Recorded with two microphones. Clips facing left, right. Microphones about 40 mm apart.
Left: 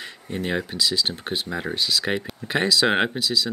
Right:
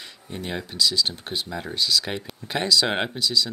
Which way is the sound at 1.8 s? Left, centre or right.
Centre.